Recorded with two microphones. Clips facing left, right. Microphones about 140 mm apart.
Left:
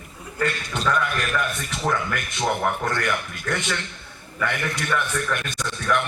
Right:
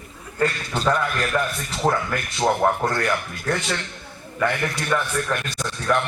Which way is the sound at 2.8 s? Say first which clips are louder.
Right 2 dB; 35° right (ahead or behind).